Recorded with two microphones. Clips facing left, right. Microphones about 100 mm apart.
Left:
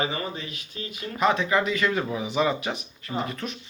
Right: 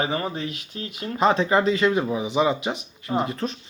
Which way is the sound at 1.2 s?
30° right (ahead or behind).